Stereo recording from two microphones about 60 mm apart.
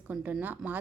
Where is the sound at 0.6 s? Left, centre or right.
Centre.